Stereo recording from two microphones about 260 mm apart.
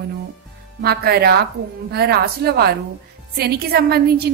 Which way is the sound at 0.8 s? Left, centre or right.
Right.